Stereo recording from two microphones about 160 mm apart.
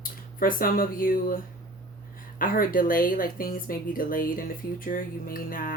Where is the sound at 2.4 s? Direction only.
60° left (ahead or behind).